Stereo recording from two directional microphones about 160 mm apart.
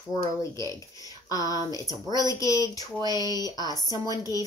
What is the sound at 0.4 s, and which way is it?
Speech, 20° left (ahead or behind).